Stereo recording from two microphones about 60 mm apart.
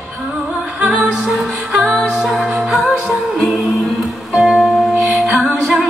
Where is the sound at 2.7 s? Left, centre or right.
Centre.